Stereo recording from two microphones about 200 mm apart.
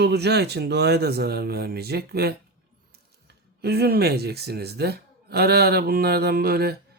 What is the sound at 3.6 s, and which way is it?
Speech, 50° right (ahead or behind).